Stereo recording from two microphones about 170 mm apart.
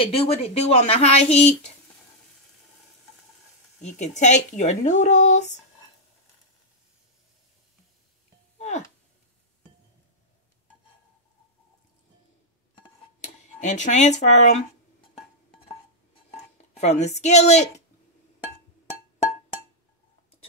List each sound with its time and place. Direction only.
0.0 s speech: 35° left (ahead or behind)
4.0 s speech: 45° left (ahead or behind)
8.5 s a sound: 45° left (ahead or behind)
13.2 s speech: 45° left (ahead or behind)
16.8 s speech: 40° left (ahead or behind)